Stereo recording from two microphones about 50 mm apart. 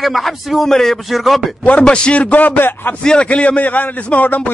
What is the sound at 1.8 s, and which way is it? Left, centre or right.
Speech, left.